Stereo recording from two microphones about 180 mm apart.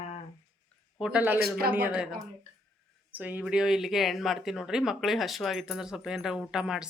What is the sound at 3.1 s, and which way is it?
Speech, 10° right (ahead or behind).